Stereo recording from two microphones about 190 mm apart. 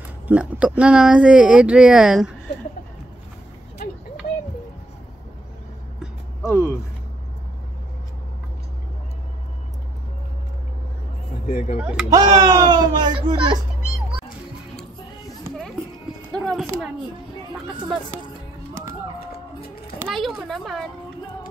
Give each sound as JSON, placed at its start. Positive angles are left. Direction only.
{"t": 0.3, "sound": "speech", "side_deg": -5}
{"t": 6.4, "sound": "speech", "side_deg": 15}
{"t": 11.4, "sound": "speech", "side_deg": 40}
{"t": 11.8, "sound": "speech", "side_deg": -5}
{"t": 12.1, "sound": "speech", "side_deg": -20}
{"t": 16.3, "sound": "a sound", "side_deg": 5}
{"t": 19.1, "sound": "a sound", "side_deg": 55}
{"t": 20.1, "sound": "speech", "side_deg": 0}